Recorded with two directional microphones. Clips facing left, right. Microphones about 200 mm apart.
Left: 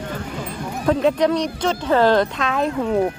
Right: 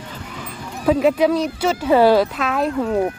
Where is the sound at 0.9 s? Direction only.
5° right (ahead or behind).